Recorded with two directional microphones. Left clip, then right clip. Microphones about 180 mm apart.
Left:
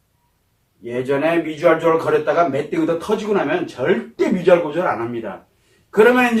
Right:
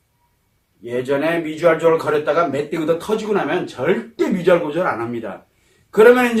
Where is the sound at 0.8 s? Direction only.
30° right (ahead or behind).